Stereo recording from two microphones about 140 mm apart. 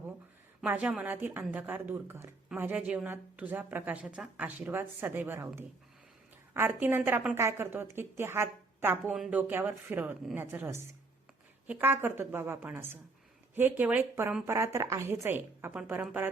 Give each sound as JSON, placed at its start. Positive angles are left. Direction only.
{"t": 0.6, "sound": "a woman's voice", "side_deg": -10}
{"t": 6.5, "sound": "a woman's voice", "side_deg": -15}
{"t": 9.0, "sound": "a woman's voice", "side_deg": -5}